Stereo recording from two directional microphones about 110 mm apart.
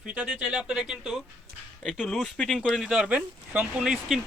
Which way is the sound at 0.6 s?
5° right (ahead or behind).